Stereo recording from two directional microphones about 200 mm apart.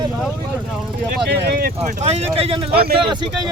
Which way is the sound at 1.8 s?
35° right (ahead or behind).